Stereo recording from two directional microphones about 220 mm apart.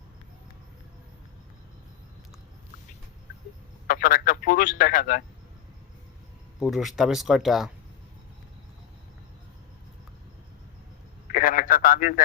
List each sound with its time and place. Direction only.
3.8 s speech: 40° left (ahead or behind)
6.6 s speech: centre (ahead or behind)
11.3 s radio: 40° left (ahead or behind)